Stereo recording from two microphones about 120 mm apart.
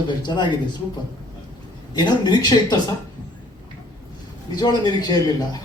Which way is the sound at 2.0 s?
40° left (ahead or behind).